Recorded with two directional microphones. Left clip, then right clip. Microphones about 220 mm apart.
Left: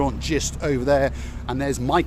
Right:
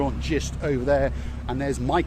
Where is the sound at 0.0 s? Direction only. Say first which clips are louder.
Left 3 dB; 25° left (ahead or behind).